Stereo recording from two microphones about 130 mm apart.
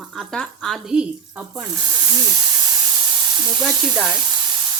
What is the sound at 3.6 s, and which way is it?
Speech, centre (ahead or behind).